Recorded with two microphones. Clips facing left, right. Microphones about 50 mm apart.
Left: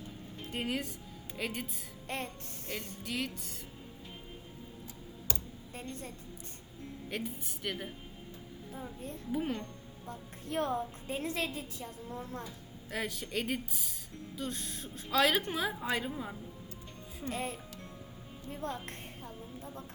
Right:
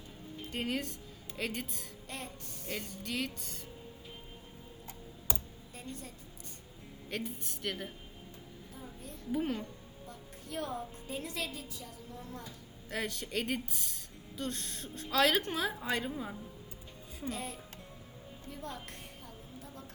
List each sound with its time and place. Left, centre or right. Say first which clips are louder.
0.5 s a woman's voice: even; centre
2.0 s music: left 6 dB; left
3.0 s a woman's voice: left 1 dB; centre
5.3 s computer keyboard: right 2 dB; centre
7.1 s a woman's voice: right 1 dB; centre
8.7 s a woman's voice: left 6 dB; left
9.3 s a woman's voice: right 1 dB; centre
10.1 s a woman's voice: left 5 dB; left
12.9 s a woman's voice: even; centre
17.2 s a woman's voice: left 2 dB; left
18.4 s a sound: left 5 dB; left